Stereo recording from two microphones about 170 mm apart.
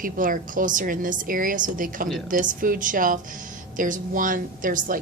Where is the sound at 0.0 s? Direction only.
55° right (ahead or behind).